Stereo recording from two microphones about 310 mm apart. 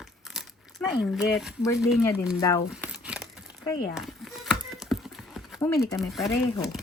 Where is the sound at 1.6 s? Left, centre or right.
Centre.